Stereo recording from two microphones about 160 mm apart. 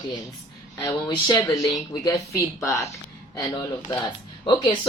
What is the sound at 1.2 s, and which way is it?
Speech, 25° left (ahead or behind).